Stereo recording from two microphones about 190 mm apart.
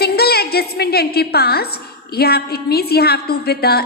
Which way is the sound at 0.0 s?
55° left (ahead or behind).